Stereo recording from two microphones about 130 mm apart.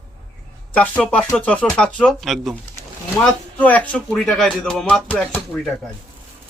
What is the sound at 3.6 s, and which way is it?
A man's voice, 10° left (ahead or behind).